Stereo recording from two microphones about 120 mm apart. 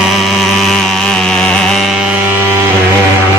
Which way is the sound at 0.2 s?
Centre (ahead or behind).